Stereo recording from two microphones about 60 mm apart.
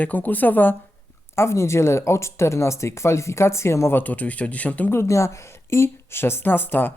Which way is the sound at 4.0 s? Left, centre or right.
Left.